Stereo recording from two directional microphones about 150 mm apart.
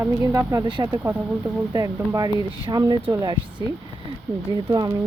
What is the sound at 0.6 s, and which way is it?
Speech, 30° right (ahead or behind).